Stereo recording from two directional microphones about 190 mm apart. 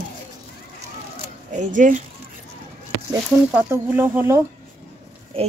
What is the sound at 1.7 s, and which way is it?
Speech, 40° right (ahead or behind).